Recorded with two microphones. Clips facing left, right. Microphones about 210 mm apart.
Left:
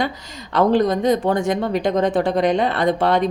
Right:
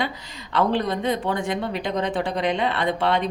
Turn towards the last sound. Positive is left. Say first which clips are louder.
# left 5 dB
turn(degrees=45)  # may be behind; listen again after turning